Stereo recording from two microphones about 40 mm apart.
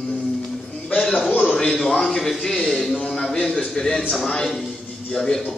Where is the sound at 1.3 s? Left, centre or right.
Left.